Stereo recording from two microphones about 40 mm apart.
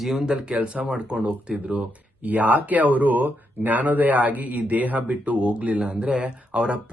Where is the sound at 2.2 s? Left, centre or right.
Right.